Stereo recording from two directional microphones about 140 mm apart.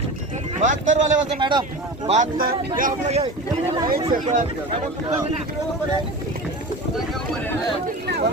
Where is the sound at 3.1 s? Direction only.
45° right (ahead or behind).